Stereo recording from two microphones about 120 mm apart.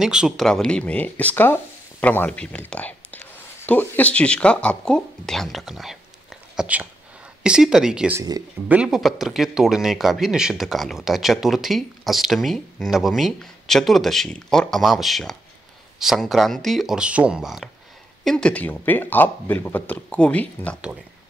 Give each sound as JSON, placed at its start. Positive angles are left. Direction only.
{"t": 0.0, "sound": "speech", "side_deg": -5}
{"t": 0.5, "sound": "speech", "side_deg": 5}
{"t": 8.2, "sound": "speech", "side_deg": -30}
{"t": 8.6, "sound": "speech", "side_deg": -10}
{"t": 18.2, "sound": "speech", "side_deg": 5}